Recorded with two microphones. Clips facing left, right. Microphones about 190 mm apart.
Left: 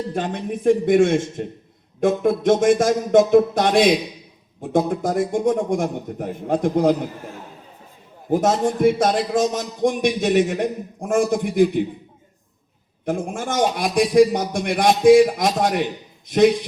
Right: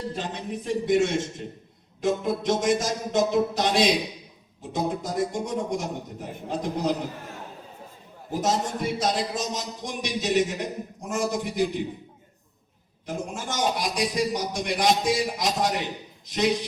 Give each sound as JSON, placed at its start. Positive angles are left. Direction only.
{"t": 0.1, "sound": "a man's voice", "side_deg": 55}
{"t": 8.3, "sound": "a man's voice", "side_deg": 55}
{"t": 13.1, "sound": "a man's voice", "side_deg": 55}